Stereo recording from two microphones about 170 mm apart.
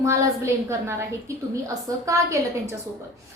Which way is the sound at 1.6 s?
20° right (ahead or behind).